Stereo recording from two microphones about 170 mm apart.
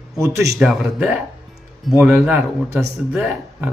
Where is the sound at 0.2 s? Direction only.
20° right (ahead or behind).